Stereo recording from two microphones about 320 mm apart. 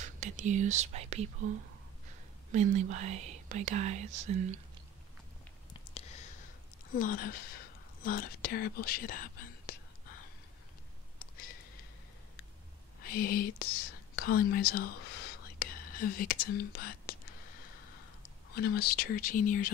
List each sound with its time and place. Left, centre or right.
0.0 s speech: right
2.5 s speech: right
5.7 s a sound: centre
7.0 s speech: left
13.0 s speech: left
18.5 s speech: left